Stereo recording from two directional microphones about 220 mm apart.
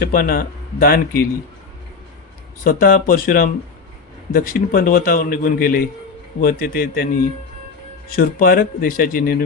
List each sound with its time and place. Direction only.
0.0 s a man's voice: 40° left (ahead or behind)
2.6 s a man's voice: 40° left (ahead or behind)